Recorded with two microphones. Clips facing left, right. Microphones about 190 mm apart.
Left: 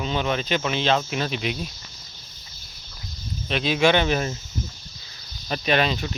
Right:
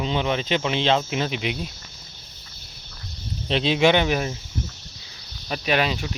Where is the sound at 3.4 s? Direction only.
25° right (ahead or behind).